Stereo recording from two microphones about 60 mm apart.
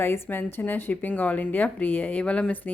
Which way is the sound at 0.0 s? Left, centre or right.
Left.